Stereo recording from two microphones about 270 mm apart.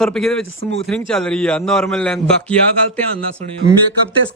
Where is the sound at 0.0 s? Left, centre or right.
Centre.